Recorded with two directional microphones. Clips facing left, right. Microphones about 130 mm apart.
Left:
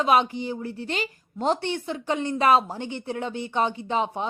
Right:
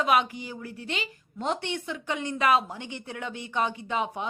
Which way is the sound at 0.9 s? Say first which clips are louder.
Left 5 dB; 40° left (ahead or behind).